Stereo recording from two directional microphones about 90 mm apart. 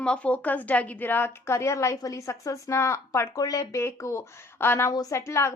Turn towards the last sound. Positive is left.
turn(degrees=30)  # may be behind; listen again after turning